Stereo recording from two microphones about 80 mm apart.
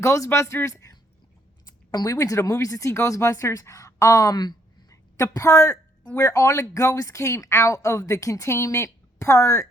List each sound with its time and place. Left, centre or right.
0.0 s speech: left
2.0 s speech: left